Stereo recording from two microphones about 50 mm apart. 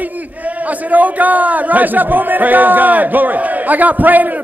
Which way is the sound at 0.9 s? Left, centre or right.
Right.